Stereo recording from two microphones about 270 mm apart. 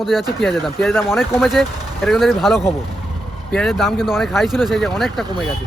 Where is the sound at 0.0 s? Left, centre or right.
Centre.